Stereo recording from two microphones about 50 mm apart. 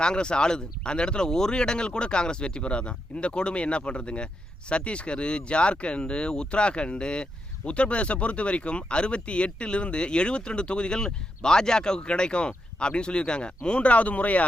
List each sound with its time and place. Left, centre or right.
0.0 s speech: centre